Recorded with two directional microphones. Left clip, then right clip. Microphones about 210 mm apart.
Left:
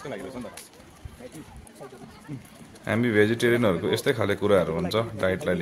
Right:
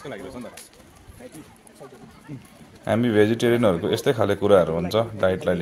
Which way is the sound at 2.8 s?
5° right (ahead or behind).